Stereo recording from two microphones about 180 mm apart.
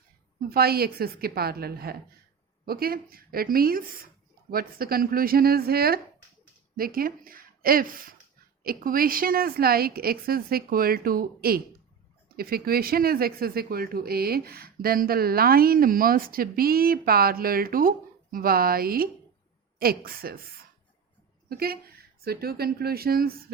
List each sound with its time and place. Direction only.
0.5 s speech: 60° right (ahead or behind)
21.5 s speech: 55° right (ahead or behind)